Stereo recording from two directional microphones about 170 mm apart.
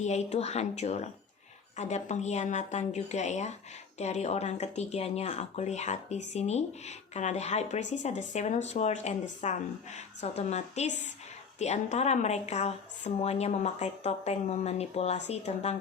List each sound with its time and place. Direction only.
0.0 s speech: 40° left (ahead or behind)